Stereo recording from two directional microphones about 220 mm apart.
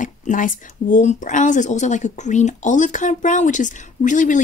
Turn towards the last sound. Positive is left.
turn(degrees=35)  # may be behind; listen again after turning